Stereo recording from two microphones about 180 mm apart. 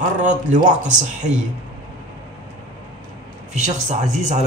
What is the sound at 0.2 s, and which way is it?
A man's voice, 45° right (ahead or behind).